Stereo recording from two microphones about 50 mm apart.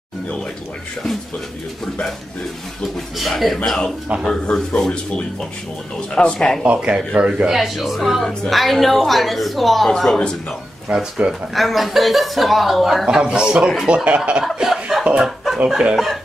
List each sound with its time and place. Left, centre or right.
2.8 s a man's voice: centre
3.6 s speech: centre
5.9 s speech: centre
6.6 s a man's voice: right; by 10.1 s centre
10.9 s speech: centre
11.5 s a man's voice: centre
13.0 s a man's voice: centre
14.4 s snicker: centre
15.1 s chicken: centre